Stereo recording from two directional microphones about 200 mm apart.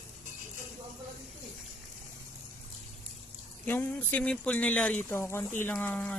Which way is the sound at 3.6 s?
10° left (ahead or behind).